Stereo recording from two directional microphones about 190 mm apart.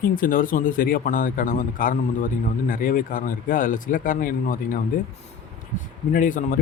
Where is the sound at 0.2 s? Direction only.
45° left (ahead or behind).